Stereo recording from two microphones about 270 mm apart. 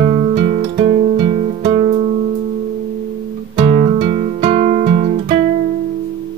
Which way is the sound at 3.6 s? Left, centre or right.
Right.